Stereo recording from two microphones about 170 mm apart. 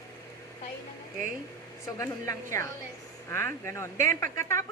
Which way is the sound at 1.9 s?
15° left (ahead or behind).